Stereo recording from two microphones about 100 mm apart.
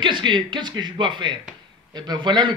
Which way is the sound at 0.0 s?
55° right (ahead or behind).